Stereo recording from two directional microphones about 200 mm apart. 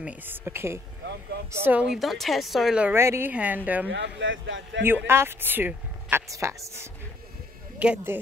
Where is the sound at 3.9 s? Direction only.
65° right (ahead or behind).